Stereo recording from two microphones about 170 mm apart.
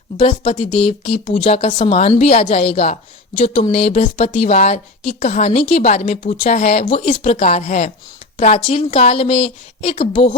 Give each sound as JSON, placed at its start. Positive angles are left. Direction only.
{"t": 0.2, "sound": "speech", "side_deg": 35}